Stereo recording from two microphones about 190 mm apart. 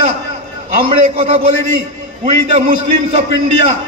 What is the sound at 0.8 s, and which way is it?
Speech, 30° right (ahead or behind).